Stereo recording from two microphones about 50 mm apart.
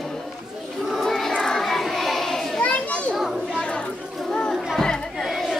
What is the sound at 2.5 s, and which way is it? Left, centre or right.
Children playing, left.